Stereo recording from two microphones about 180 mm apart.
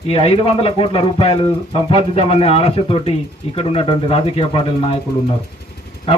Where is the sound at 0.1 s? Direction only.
35° left (ahead or behind).